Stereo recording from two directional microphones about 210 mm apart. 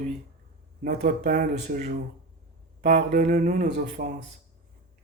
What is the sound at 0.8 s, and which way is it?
Speech, 40° right (ahead or behind).